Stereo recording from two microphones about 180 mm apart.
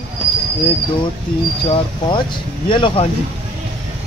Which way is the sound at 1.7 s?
25° left (ahead or behind).